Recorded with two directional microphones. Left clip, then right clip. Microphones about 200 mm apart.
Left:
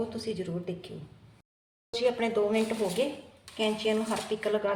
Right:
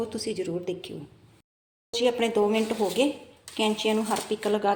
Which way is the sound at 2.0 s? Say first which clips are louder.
Right 3 dB; 35° right (ahead or behind).